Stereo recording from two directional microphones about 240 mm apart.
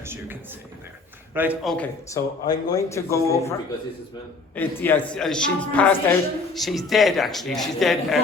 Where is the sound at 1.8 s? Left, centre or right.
Centre.